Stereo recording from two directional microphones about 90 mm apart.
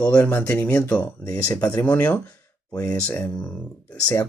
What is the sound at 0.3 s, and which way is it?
Speech, 25° left (ahead or behind).